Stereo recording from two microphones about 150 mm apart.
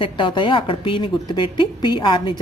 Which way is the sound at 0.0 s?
35° left (ahead or behind).